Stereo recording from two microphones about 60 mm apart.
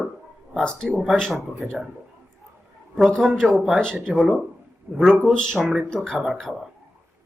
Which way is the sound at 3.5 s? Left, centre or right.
Centre.